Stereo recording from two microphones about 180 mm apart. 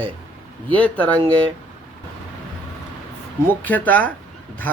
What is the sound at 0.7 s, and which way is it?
Speech, 10° left (ahead or behind).